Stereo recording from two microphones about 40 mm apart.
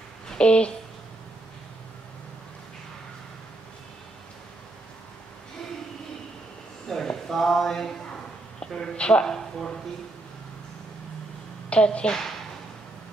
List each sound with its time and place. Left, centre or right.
0.4 s a woman's voice: left
6.9 s clip-clop: centre
8.5 s a sound: centre
8.9 s a woman's voice: left
9.2 s speech: centre
11.7 s a woman's voice: left